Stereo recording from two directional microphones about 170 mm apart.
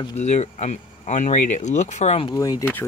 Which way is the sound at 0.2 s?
40° left (ahead or behind).